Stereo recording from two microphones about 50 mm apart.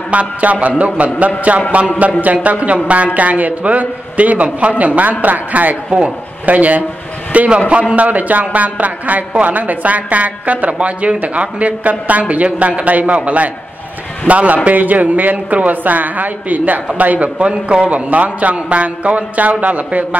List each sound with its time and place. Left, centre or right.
0.1 s a woman's voice: right
5.9 s speech: centre
6.4 s a woman's voice: right
7.3 s speech: right
7.9 s a woman's voice: right